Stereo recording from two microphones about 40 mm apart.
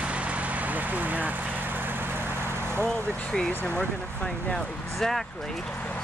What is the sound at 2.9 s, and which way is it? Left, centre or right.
Speech, centre.